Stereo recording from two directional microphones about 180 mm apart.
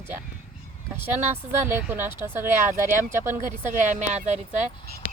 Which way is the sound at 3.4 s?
45° right (ahead or behind).